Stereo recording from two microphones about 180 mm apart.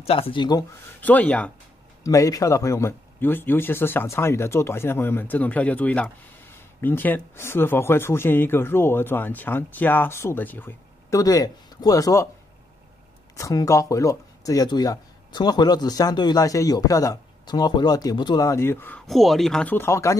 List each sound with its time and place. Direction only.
0.0 s speech: 30° left (ahead or behind)
1.0 s speech: 10° left (ahead or behind)
2.0 s speech: 20° left (ahead or behind)
13.4 s speech: 20° left (ahead or behind)